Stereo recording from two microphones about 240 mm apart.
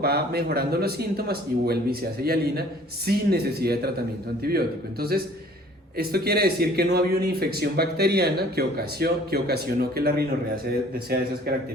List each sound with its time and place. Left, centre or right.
0.0 s speech: right